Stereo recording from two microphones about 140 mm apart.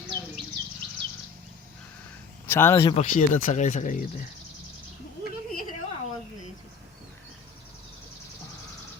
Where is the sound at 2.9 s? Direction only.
70° left (ahead or behind).